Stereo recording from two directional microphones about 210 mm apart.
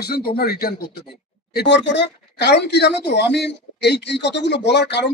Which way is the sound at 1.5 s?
60° left (ahead or behind).